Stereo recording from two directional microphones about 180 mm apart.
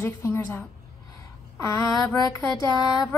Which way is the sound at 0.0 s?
15° left (ahead or behind).